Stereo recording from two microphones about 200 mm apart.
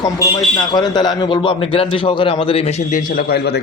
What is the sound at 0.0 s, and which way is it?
A man's voice, 20° left (ahead or behind).